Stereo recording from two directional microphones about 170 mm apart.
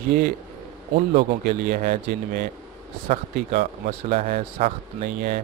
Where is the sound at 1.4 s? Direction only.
45° right (ahead or behind).